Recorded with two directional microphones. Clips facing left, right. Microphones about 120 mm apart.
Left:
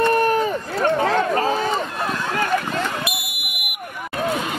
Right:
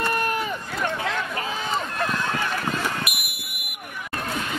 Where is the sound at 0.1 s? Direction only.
35° left (ahead or behind).